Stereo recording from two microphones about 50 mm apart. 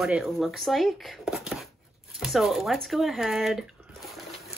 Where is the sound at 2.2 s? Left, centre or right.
Centre.